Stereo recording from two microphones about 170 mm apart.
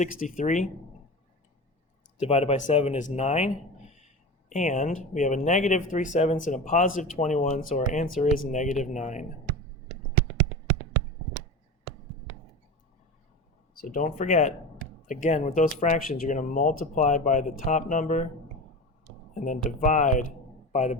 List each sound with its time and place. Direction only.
0.0 s speech: 45° left (ahead or behind)
2.2 s speech: 35° left (ahead or behind)
10.2 s a sound: 5° left (ahead or behind)
13.8 s speech: 50° left (ahead or behind)
19.3 s speech: 50° left (ahead or behind)